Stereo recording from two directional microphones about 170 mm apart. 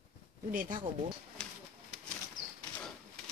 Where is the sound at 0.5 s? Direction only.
50° right (ahead or behind).